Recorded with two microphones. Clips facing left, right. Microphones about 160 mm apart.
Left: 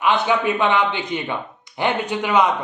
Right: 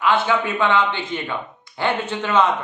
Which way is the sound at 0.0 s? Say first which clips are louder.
Left 1 dB; 20° left (ahead or behind).